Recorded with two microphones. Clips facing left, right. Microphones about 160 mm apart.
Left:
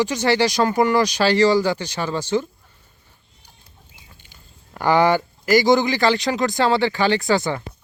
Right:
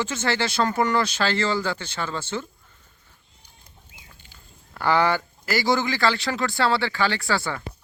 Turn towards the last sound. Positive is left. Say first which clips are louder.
# left 7 dB
turn(degrees=20)  # may be behind; listen again after turning